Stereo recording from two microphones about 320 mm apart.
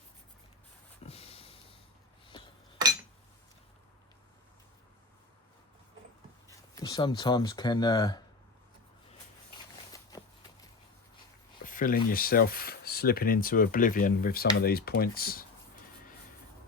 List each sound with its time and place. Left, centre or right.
1.0 s a sound: centre
2.3 s chink: centre
6.7 s speech: centre
10.1 s walk: centre
11.6 s speech: left